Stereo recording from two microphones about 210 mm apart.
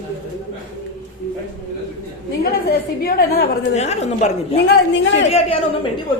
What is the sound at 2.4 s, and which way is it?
A woman's voice, 45° left (ahead or behind).